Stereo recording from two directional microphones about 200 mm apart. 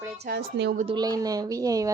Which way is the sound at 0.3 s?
55° right (ahead or behind).